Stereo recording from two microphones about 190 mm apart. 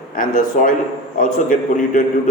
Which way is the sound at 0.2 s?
45° left (ahead or behind).